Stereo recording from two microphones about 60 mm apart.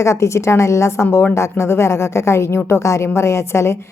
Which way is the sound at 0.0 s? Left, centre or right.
Left.